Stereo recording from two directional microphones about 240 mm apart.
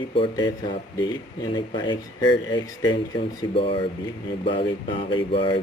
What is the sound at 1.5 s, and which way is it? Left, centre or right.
Speech, centre.